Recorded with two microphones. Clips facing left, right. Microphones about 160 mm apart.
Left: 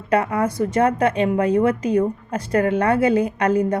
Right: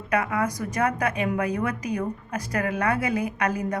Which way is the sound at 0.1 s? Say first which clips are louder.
Left 5 dB; 35° left (ahead or behind).